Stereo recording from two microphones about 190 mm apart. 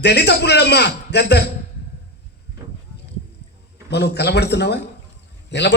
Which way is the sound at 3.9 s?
60° left (ahead or behind).